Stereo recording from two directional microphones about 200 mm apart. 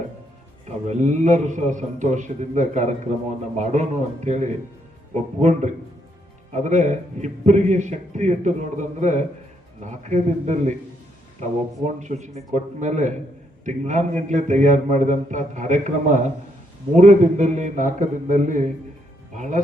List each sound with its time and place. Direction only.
0.9 s a man's voice: 35° right (ahead or behind)
11.9 s a man's voice: 35° right (ahead or behind)